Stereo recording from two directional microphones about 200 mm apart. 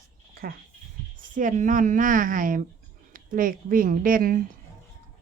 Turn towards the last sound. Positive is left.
turn(degrees=-45)  # may be behind; listen again after turning